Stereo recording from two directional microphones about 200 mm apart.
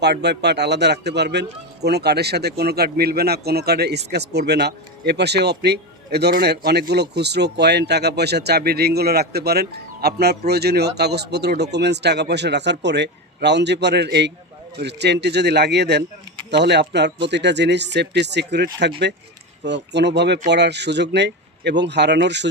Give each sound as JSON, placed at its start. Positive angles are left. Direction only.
{"t": 0.0, "sound": "speech", "side_deg": -55}